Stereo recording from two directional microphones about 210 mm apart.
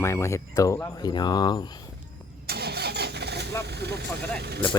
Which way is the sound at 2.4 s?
50° right (ahead or behind).